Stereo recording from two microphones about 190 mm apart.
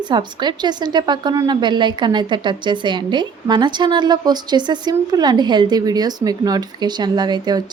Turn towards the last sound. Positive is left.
turn(degrees=-20)  # may be behind; listen again after turning